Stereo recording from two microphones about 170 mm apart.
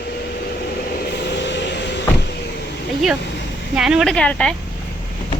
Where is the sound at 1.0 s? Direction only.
85° left.